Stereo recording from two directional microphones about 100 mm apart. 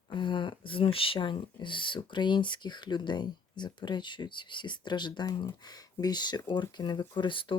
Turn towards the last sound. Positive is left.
turn(degrees=55)  # may be behind; listen again after turning